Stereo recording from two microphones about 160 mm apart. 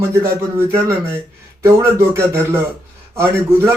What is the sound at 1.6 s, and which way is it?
Speech, 15° right (ahead or behind).